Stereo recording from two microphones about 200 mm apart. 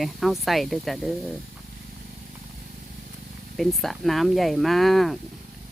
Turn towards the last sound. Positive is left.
turn(degrees=0)  # may be behind; listen again after turning